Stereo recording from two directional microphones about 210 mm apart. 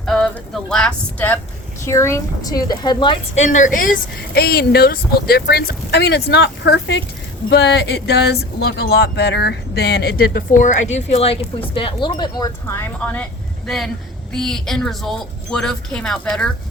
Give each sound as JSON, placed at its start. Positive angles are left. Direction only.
{"t": 0.0, "sound": "a woman's voice", "side_deg": 0}